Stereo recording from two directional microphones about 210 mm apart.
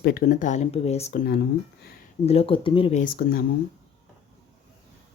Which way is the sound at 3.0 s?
45° left (ahead or behind).